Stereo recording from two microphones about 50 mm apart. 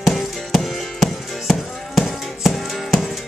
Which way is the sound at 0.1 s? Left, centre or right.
Centre.